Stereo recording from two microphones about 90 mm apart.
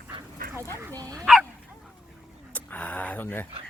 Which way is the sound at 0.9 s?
40° right (ahead or behind).